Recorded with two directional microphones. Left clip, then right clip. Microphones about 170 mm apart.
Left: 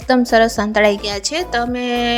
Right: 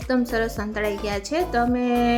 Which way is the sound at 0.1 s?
45° left (ahead or behind).